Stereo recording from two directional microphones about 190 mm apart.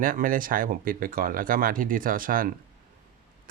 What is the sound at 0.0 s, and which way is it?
Speech, 45° right (ahead or behind).